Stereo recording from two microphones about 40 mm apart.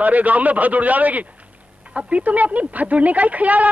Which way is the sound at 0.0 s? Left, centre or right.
Right.